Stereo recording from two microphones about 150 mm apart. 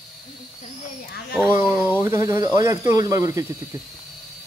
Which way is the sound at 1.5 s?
20° right (ahead or behind).